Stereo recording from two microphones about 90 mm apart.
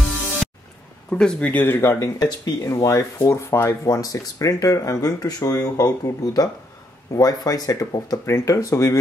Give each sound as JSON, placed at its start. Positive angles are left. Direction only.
{"t": 1.1, "sound": "speech", "side_deg": 10}
{"t": 2.1, "sound": "speech", "side_deg": 50}
{"t": 2.6, "sound": "speech", "side_deg": 35}